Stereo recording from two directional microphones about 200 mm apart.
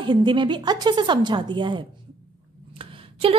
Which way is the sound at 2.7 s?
25° right (ahead or behind).